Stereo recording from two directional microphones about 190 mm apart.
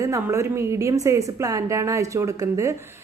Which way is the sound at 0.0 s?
15° right (ahead or behind).